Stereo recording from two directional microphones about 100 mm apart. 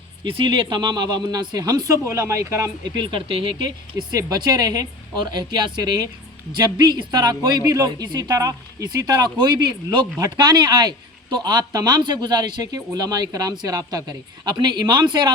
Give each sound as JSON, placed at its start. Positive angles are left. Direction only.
{"t": 0.3, "sound": "a woman's voice", "side_deg": -55}
{"t": 2.9, "sound": "speech", "side_deg": -55}
{"t": 4.1, "sound": "a woman's voice", "side_deg": -40}
{"t": 5.2, "sound": "a woman's voice", "side_deg": -50}